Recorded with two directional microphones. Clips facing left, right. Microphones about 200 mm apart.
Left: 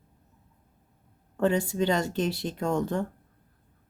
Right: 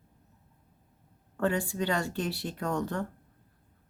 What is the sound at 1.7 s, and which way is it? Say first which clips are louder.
Speech: left 4 dB; 20° left (ahead or behind).